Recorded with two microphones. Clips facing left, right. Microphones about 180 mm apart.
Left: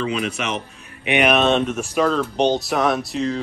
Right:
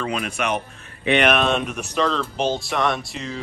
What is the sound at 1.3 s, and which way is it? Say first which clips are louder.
Speech: left 3 dB; centre (ahead or behind).